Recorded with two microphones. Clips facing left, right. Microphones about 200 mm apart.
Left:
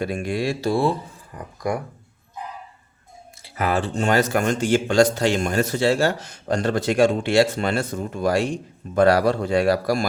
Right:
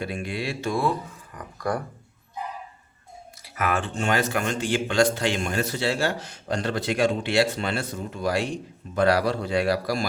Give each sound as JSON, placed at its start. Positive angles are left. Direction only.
{"t": 0.0, "sound": "speech", "side_deg": 45}
{"t": 3.4, "sound": "a man's voice", "side_deg": 30}